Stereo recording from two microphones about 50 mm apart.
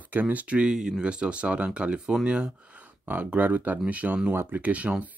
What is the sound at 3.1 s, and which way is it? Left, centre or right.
Speech, right.